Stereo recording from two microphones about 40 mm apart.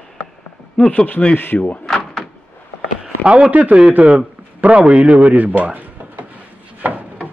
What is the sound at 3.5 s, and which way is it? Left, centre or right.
A man's voice, right.